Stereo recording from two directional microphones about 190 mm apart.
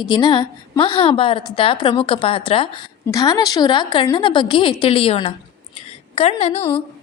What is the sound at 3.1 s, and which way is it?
A woman's voice, 20° left (ahead or behind).